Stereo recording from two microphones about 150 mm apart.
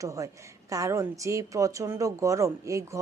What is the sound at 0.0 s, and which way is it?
A woman's voice, 20° right (ahead or behind).